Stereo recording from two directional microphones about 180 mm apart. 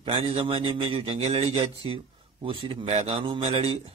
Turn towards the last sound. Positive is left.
turn(degrees=-30)  # may be behind; listen again after turning